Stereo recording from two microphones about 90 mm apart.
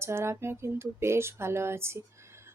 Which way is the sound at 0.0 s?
30° right (ahead or behind).